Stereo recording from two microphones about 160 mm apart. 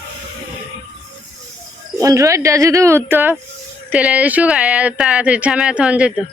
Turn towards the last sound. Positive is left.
turn(degrees=-5)  # may be behind; listen again after turning